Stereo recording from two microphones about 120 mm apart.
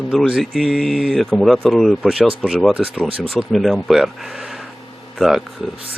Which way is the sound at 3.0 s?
50° right (ahead or behind).